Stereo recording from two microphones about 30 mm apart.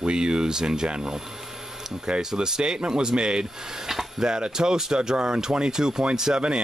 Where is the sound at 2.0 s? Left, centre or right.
Right.